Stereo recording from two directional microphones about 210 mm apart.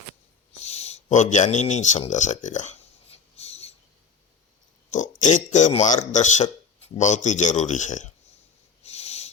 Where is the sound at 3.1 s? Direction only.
30° left (ahead or behind).